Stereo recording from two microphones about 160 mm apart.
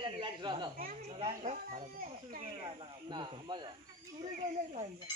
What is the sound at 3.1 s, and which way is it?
Speech, 30° right (ahead or behind).